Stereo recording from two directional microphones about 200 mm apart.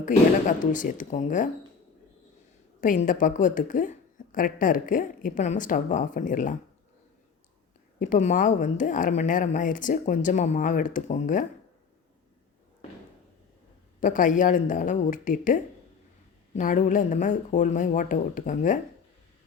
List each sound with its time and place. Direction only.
0.0 s a woman's voice: 40° left (ahead or behind)
2.8 s a woman's voice: 40° left (ahead or behind)
7.9 s a woman's voice: 40° left (ahead or behind)
14.0 s a woman's voice: 40° left (ahead or behind)